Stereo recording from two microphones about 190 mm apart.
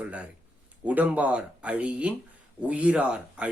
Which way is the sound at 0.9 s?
10° right (ahead or behind).